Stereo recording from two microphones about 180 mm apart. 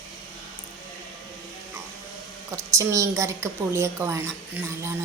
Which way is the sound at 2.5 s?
15° right (ahead or behind).